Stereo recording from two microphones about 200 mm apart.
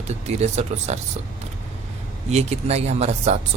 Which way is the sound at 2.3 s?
35° right (ahead or behind).